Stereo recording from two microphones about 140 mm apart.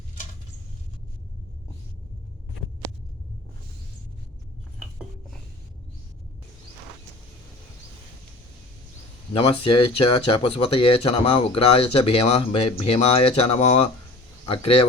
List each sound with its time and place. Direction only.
9.3 s speech: 40° left (ahead or behind)